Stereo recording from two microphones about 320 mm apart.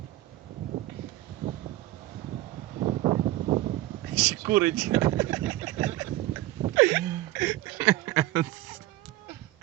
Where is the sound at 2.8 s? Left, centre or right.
Centre.